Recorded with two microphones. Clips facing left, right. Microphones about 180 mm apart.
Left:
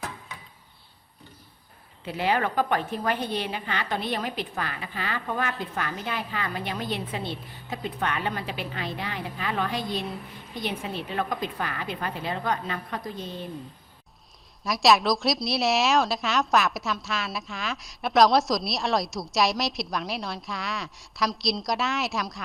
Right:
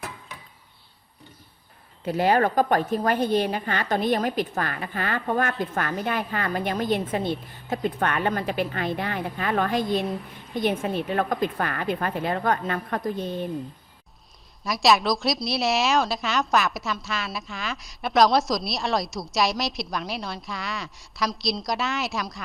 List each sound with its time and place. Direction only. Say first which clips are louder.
2.0 s a woman's voice: right 5 dB; 45° right (ahead or behind)
14.6 s a woman's voice: even; centre (ahead or behind)